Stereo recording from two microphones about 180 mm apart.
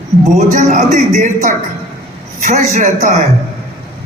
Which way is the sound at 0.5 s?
40° right (ahead or behind).